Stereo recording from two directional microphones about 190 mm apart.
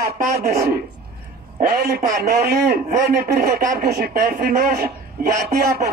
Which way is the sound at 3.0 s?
20° right (ahead or behind).